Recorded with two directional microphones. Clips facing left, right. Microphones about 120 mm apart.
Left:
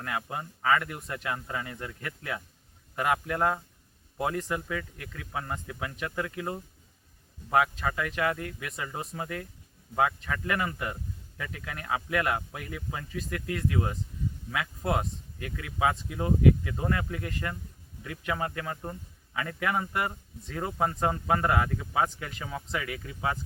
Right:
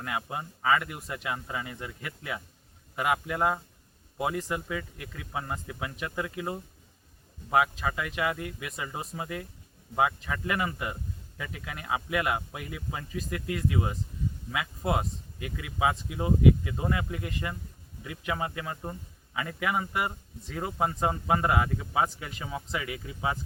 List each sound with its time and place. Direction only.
0.0 s speech: 15° right (ahead or behind)
7.5 s speech: 5° right (ahead or behind)
22.9 s speech: 20° right (ahead or behind)